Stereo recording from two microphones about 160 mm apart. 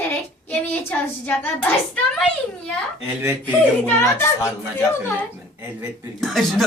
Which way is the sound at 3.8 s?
15° left (ahead or behind).